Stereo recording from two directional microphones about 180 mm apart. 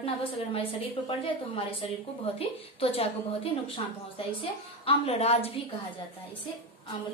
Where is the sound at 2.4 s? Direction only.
30° left (ahead or behind).